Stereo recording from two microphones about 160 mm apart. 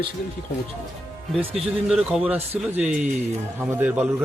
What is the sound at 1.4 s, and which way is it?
Speech, 40° right (ahead or behind).